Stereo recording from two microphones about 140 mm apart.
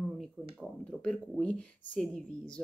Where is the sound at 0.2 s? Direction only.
5° left (ahead or behind).